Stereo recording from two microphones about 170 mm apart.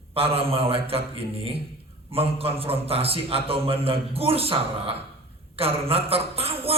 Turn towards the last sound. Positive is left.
turn(degrees=-35)  # may be behind; listen again after turning